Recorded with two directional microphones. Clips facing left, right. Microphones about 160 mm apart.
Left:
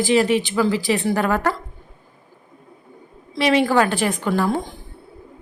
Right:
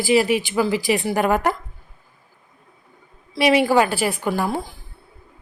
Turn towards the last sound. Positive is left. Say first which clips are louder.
# left 2 dB
turn(degrees=-5)  # may be behind; listen again after turning